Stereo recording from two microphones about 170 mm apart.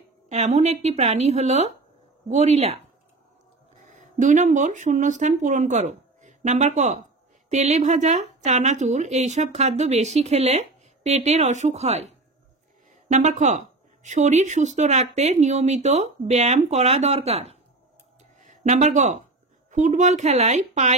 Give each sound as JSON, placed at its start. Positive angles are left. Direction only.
{"t": 0.3, "sound": "a woman's voice", "side_deg": -40}